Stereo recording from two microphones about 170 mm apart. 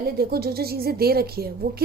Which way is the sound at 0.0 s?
65° right (ahead or behind).